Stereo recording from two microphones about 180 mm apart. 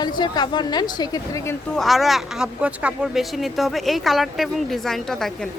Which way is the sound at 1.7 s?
Centre (ahead or behind).